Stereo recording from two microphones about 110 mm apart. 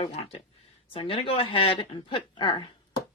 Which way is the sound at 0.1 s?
85° left.